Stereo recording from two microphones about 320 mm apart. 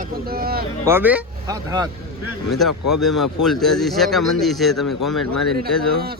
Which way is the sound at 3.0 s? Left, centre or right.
Centre.